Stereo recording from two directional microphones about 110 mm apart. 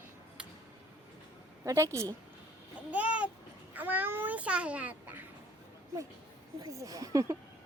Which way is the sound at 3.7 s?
15° right (ahead or behind).